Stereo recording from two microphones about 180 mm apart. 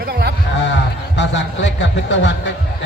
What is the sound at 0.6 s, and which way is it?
A man's voice, 85° left.